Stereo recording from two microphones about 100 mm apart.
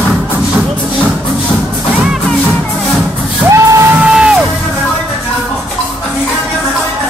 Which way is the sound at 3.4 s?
30° right (ahead or behind).